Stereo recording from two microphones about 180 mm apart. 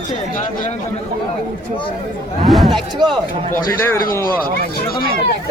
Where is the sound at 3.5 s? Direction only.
15° left (ahead or behind).